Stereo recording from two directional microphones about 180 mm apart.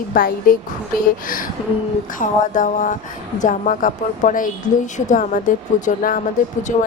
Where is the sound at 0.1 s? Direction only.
50° left (ahead or behind).